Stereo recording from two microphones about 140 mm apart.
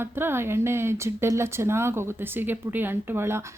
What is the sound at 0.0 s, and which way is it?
Speech, 15° right (ahead or behind).